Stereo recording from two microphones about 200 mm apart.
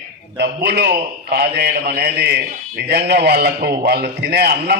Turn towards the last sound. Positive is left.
turn(degrees=-55)  # may be behind; listen again after turning